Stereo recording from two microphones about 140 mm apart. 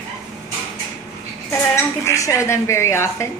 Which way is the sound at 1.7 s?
20° left (ahead or behind).